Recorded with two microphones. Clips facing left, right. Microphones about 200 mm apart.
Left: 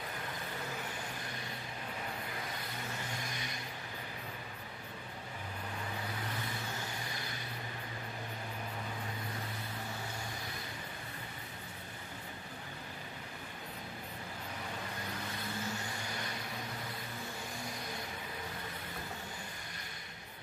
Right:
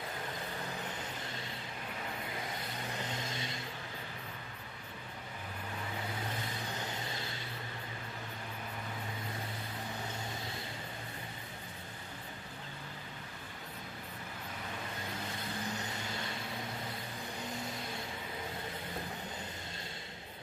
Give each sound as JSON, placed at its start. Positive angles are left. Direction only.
{"t": 1.2, "sound": "a sound", "side_deg": -25}
{"t": 2.9, "sound": "vehicle", "side_deg": -20}
{"t": 6.2, "sound": "vehicle", "side_deg": -20}
{"t": 15.3, "sound": "vehicle", "side_deg": -20}